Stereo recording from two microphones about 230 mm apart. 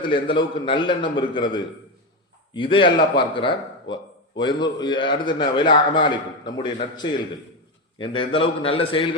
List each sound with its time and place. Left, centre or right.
0.0 s a man's voice: left